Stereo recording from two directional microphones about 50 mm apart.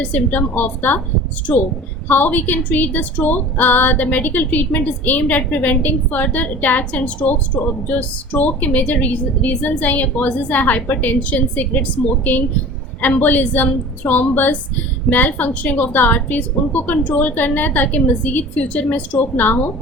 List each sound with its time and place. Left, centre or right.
0.0 s a woman's voice: left